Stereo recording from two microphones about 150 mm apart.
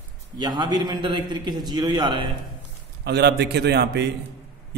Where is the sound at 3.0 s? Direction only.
90° right.